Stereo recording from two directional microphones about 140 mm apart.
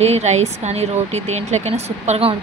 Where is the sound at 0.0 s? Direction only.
50° right (ahead or behind).